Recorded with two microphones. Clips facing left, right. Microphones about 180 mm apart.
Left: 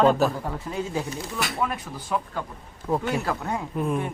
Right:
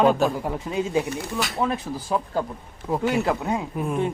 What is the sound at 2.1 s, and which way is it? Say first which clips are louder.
Speech: right 2 dB; 30° right (ahead or behind).